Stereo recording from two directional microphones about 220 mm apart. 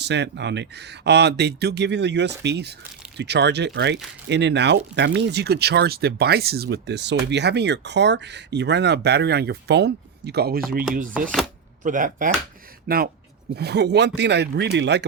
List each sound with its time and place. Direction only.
0.0 s speech: 50° right (ahead or behind)
11.8 s speech: 35° right (ahead or behind); by 15.0 s 50° right (ahead or behind)